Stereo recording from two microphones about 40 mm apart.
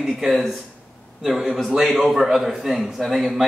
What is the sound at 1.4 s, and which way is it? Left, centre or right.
Speech, centre.